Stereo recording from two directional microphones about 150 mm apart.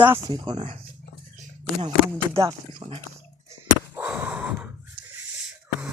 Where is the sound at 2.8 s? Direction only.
45° right (ahead or behind).